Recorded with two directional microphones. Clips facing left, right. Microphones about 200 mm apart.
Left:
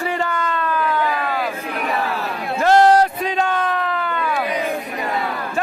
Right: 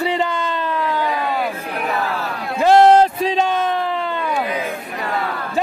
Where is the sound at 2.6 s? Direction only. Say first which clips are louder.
Right 2 dB; 20° right (ahead or behind).